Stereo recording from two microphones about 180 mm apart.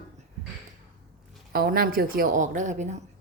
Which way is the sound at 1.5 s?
55° right (ahead or behind).